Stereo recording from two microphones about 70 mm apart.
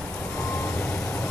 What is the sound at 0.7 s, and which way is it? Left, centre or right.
Vehicle, centre.